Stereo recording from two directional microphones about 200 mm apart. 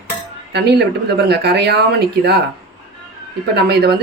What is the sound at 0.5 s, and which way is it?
Speech, 55° right (ahead or behind).